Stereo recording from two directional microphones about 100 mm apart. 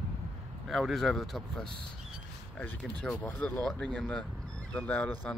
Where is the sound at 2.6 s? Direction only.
15° left (ahead or behind).